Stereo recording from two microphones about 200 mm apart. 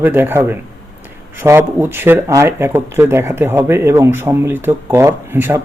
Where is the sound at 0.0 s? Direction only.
10° right (ahead or behind).